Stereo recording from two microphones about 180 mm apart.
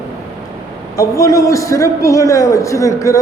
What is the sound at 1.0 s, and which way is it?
A man's voice, 15° left (ahead or behind).